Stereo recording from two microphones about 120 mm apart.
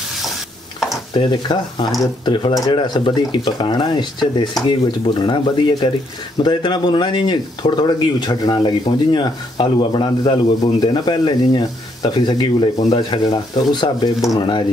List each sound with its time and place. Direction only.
1.1 s speech: 40° left (ahead or behind)